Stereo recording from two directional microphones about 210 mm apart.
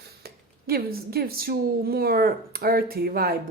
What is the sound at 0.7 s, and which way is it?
Speech, 45° right (ahead or behind).